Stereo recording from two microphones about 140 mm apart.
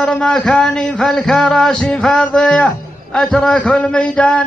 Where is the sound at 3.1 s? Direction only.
5° left (ahead or behind).